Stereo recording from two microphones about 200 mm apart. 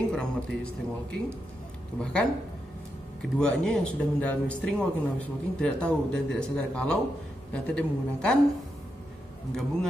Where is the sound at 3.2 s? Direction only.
5° left (ahead or behind).